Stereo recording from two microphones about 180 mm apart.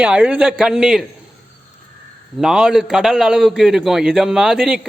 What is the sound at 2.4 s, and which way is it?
A man's voice, 5° right (ahead or behind).